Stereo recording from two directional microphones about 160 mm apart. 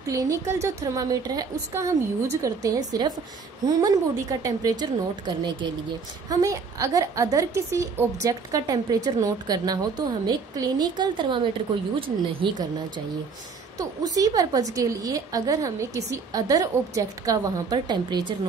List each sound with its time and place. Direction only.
0.0 s a woman's voice: 20° right (ahead or behind)
13.7 s a woman's voice: 20° right (ahead or behind)